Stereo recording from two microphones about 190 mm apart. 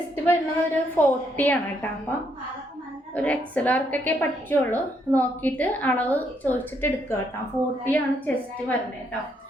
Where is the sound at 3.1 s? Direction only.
5° left (ahead or behind).